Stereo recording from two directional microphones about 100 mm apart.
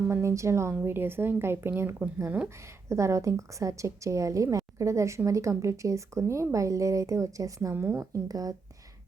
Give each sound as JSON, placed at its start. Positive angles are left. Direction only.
{"t": 0.1, "sound": "a woman's voice", "side_deg": -30}